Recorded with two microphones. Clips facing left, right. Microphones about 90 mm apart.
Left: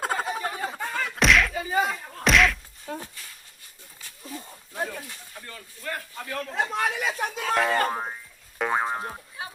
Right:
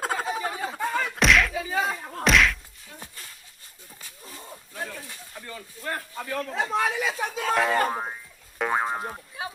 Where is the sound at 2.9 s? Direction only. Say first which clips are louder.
Left 10 dB; 70° left (ahead or behind).